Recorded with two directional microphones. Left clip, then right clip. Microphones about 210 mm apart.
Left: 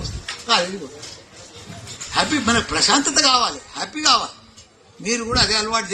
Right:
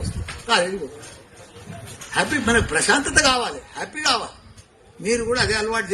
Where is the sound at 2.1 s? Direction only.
55° right (ahead or behind).